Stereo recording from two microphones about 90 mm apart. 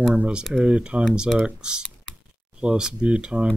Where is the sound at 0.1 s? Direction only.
20° right (ahead or behind).